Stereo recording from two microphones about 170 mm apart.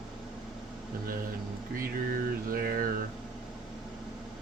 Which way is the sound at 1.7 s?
60° right (ahead or behind).